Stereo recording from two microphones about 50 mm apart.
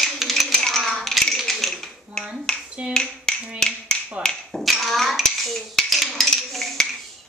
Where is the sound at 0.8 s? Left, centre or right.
Centre.